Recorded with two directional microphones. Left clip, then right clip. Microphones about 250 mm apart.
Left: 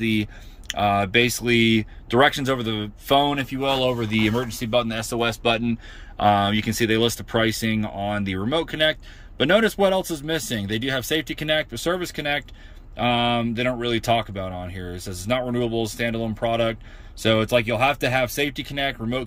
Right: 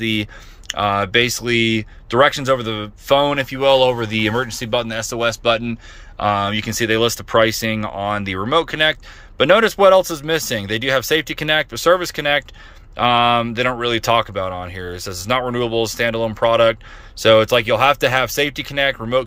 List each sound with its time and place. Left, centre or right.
0.0 s speech: centre